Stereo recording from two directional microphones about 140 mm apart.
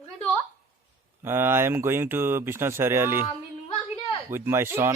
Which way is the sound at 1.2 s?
15° right (ahead or behind).